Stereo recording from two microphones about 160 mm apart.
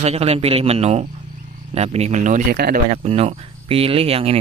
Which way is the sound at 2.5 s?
85° right.